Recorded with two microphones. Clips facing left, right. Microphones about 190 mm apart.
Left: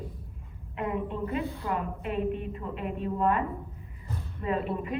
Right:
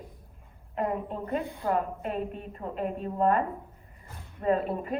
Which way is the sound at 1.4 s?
15° right (ahead or behind).